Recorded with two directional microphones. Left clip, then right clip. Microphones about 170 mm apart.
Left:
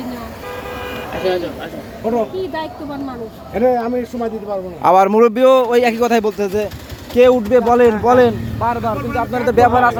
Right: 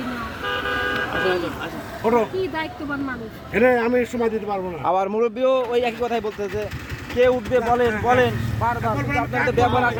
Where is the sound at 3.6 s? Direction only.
65° right (ahead or behind).